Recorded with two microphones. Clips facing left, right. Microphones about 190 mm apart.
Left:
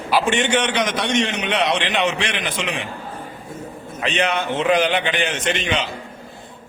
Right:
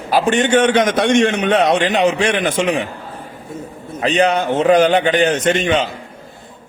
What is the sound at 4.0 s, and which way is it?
A man's voice, 35° right (ahead or behind).